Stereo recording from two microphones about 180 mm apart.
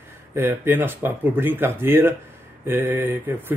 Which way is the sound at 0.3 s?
10° right (ahead or behind).